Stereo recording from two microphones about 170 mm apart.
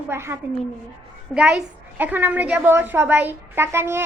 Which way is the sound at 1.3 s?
5° right (ahead or behind).